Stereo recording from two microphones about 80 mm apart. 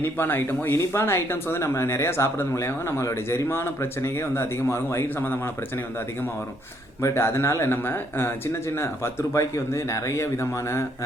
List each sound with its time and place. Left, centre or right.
0.0 s speech: left
7.1 s speech: left
9.3 s speech: left